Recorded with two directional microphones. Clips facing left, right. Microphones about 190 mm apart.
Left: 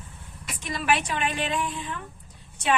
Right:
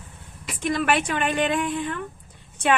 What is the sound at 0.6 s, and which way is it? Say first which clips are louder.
Speech: right 4 dB; 55° right (ahead or behind).